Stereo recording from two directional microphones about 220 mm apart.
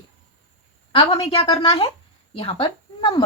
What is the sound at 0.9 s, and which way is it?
Speech, 25° left (ahead or behind).